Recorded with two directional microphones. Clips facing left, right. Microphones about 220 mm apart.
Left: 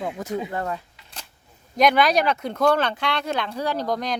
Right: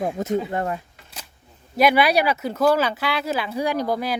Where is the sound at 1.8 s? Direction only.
5° right (ahead or behind).